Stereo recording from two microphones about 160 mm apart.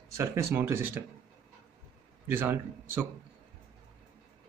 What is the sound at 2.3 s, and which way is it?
Speech, 10° right (ahead or behind).